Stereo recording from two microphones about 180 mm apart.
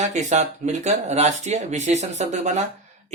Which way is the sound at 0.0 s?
40° right (ahead or behind).